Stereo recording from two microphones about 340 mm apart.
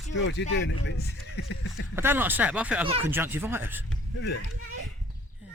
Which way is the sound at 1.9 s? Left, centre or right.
Centre.